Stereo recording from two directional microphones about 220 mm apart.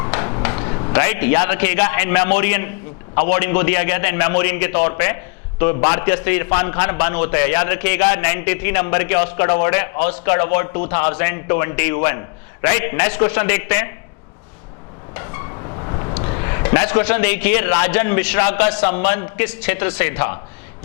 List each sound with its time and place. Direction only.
0.0 s a sound: 20° left (ahead or behind)
0.9 s a man's voice: 15° left (ahead or behind)
15.1 s vehicle: 15° left (ahead or behind)
15.9 s a man's voice: 25° left (ahead or behind)